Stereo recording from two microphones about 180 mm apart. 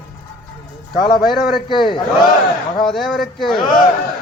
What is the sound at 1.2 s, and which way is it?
Speech, centre (ahead or behind).